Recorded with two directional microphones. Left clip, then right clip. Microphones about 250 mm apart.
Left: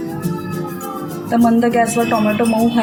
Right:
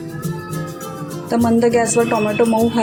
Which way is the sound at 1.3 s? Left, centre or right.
Right.